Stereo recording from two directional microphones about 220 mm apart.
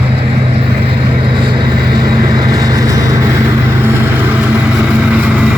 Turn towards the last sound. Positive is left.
turn(degrees=-5)  # may be behind; listen again after turning